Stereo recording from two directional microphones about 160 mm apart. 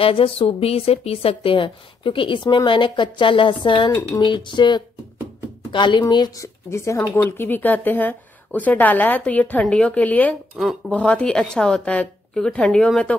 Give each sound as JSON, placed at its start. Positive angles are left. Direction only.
{"t": 0.0, "sound": "a woman's voice", "side_deg": 35}